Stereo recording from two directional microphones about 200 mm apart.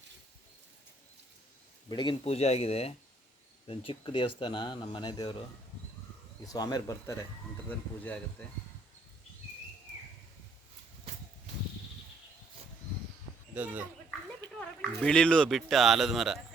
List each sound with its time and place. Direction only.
1.9 s speech: 25° left (ahead or behind)
6.5 s speech: 20° left (ahead or behind)
13.5 s speech: 5° right (ahead or behind)
14.6 s speech: 5° left (ahead or behind)